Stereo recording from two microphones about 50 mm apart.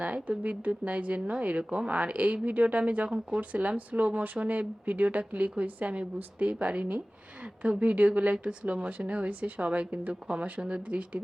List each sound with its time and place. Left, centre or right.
0.0 s speech: right